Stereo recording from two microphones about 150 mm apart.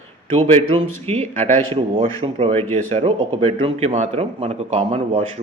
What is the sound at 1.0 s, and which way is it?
Speech, 45° right (ahead or behind).